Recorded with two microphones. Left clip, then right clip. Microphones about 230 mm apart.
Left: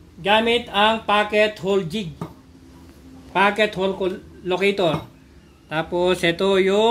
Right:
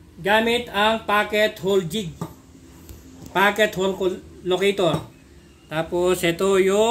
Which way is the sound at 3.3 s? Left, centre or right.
Centre.